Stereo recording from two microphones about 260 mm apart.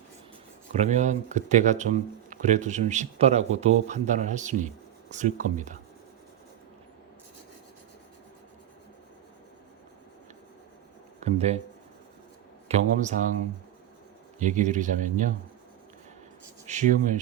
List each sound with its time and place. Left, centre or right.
0.7 s speech: right
11.2 s speech: right
12.6 s speech: right
14.3 s speech: right
16.6 s speech: right